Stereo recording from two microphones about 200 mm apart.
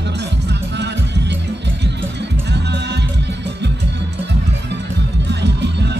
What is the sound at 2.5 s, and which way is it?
Music, 60° right (ahead or behind).